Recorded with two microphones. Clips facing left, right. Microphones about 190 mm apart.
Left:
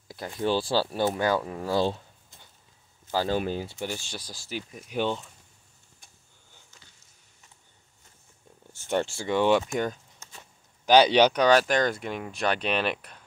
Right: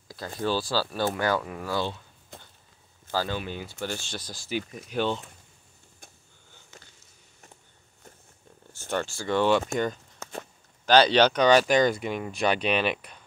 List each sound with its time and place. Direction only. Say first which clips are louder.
0.4 s speech: left 2 dB; 25° left (ahead or behind)
2.3 s a sound: right 11 dB; 65° right (ahead or behind)
3.3 s speech: left 5 dB; 35° left (ahead or behind)
3.8 s speech: right 1 dB; 10° left (ahead or behind)
6.7 s a sound: right 10 dB; 70° right (ahead or behind)
8.8 s speech: left 3 dB; 25° left (ahead or behind)
9.3 s speech: even; 15° left (ahead or behind)
10.1 s a sound: right 13 dB; 65° right (ahead or behind)
10.9 s speech: left 1 dB; 15° left (ahead or behind)